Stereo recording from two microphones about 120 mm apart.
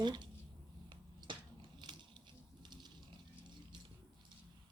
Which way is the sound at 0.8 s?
40° right (ahead or behind).